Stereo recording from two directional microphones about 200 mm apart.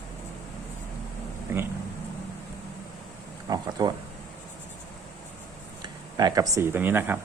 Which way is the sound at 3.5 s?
20° right (ahead or behind).